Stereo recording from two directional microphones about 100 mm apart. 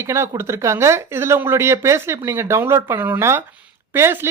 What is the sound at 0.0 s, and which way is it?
Speech, 25° right (ahead or behind).